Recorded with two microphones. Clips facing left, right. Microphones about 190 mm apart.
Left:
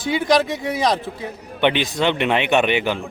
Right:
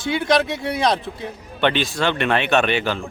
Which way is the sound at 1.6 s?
15° left (ahead or behind).